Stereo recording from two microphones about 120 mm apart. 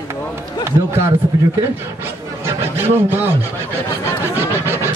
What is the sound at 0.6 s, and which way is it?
Speech, 20° right (ahead or behind).